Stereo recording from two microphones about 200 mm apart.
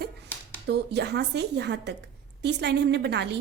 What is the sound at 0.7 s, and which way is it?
A woman's voice, 55° right (ahead or behind).